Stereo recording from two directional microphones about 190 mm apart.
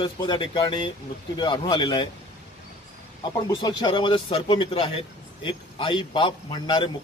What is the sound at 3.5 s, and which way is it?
A man's voice, 25° left (ahead or behind).